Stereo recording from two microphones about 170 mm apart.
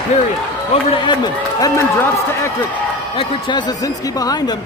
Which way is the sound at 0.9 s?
25° left (ahead or behind).